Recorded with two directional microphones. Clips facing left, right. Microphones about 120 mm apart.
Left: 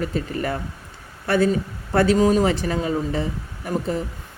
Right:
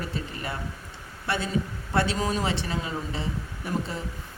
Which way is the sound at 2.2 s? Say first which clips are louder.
Left 10 dB; 40° left (ahead or behind).